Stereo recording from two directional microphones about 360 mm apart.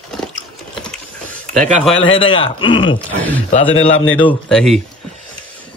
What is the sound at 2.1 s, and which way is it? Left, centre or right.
Speech, centre.